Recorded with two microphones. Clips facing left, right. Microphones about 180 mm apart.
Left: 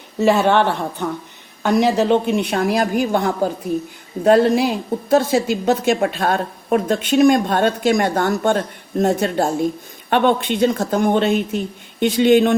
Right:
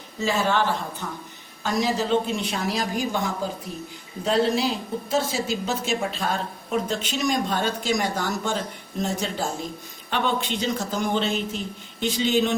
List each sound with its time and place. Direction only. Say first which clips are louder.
0.2 s a woman's voice: left 8 dB; 65° left (ahead or behind)